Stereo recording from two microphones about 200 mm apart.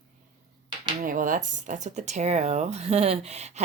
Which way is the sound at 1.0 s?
40° right (ahead or behind).